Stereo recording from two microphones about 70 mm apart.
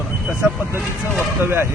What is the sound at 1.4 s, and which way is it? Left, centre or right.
Speech, right.